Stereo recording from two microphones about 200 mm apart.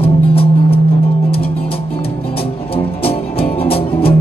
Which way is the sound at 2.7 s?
30° left (ahead or behind).